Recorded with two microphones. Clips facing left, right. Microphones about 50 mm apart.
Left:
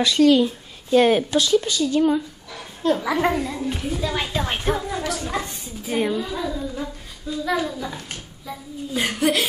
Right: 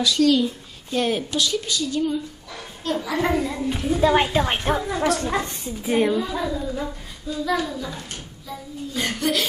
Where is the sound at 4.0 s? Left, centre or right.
Right.